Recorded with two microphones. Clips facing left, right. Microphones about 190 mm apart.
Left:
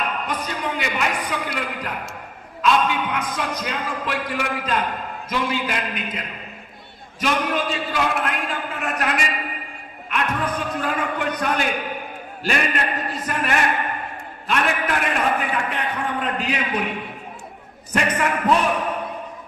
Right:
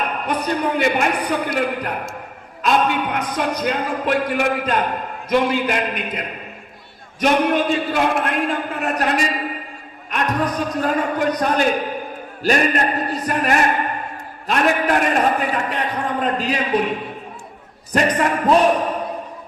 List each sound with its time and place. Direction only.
0.0 s a sound: 60° right (ahead or behind)
0.4 s speech: 40° right (ahead or behind)
1.4 s a man's voice: 50° right (ahead or behind)
3.1 s a man's voice: 35° right (ahead or behind)
3.4 s a man's voice: 60° right (ahead or behind); by 5.9 s 40° right (ahead or behind)
7.2 s a man's voice: 55° right (ahead or behind); by 18.9 s 35° right (ahead or behind)